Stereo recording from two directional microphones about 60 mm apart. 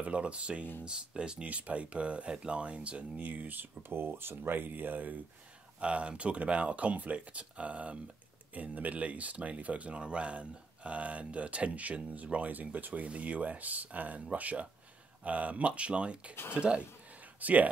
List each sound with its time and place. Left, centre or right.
0.0 s speech: centre
5.8 s speech: centre